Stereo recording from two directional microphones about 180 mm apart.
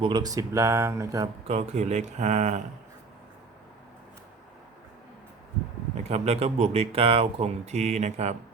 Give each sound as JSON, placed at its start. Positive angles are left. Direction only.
{"t": 0.0, "sound": "speech", "side_deg": -25}
{"t": 1.5, "sound": "speech", "side_deg": -40}
{"t": 5.9, "sound": "speech", "side_deg": -35}